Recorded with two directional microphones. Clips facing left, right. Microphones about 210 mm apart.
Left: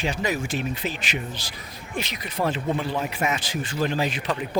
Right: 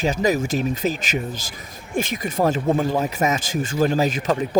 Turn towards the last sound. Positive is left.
turn(degrees=-45)  # may be behind; listen again after turning